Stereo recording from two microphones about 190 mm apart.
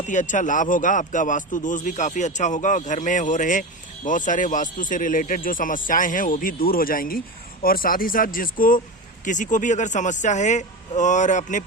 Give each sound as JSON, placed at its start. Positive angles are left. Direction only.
{"t": 0.0, "sound": "speech", "side_deg": 40}